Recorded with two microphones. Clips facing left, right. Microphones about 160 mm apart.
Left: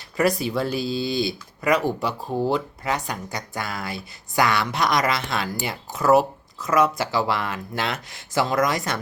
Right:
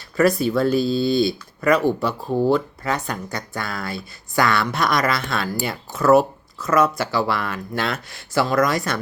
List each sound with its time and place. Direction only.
0.2 s speech: 15° left (ahead or behind)
0.8 s speech: 50° right (ahead or behind)
1.2 s speech: 15° left (ahead or behind)